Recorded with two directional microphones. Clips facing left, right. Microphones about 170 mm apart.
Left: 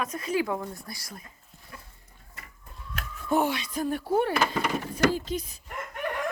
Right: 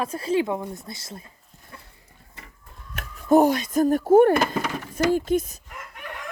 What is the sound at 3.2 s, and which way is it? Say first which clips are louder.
Speech: right 9 dB; 40° right (ahead or behind).